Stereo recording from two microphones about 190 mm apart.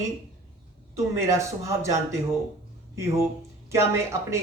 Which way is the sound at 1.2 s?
15° right (ahead or behind).